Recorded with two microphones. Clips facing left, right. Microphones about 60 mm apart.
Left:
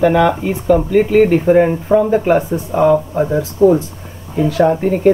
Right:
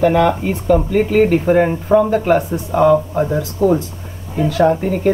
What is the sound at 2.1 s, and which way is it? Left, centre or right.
Speech, centre.